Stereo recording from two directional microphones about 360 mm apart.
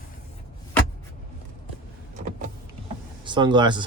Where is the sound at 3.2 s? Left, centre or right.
Centre.